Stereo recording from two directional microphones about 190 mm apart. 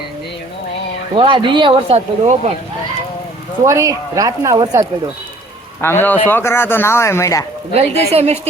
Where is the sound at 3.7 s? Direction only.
15° right (ahead or behind).